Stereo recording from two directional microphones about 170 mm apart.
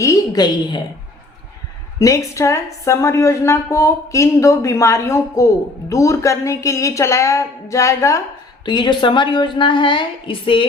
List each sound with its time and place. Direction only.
0.0 s a woman's voice: 20° left (ahead or behind)
2.0 s a woman's voice: 20° left (ahead or behind)